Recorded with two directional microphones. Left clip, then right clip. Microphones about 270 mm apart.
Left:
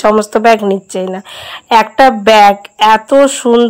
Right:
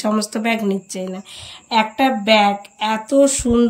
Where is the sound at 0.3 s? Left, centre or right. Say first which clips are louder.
Left 13 dB; left.